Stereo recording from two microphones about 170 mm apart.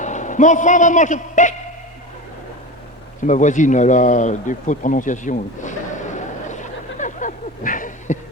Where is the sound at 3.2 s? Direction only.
45° left (ahead or behind).